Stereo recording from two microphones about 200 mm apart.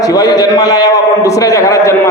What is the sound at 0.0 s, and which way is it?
A man's voice, 20° left (ahead or behind).